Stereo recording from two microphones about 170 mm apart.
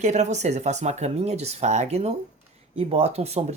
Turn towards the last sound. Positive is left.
turn(degrees=-40)  # may be behind; listen again after turning